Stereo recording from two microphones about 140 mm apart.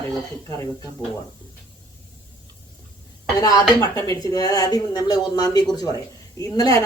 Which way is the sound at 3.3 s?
25° left (ahead or behind).